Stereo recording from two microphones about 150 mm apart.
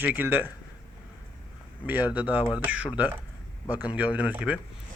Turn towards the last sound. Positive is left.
turn(degrees=-10)  # may be behind; listen again after turning